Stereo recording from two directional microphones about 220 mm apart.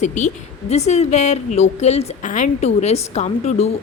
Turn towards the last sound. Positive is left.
turn(degrees=30)  # may be behind; listen again after turning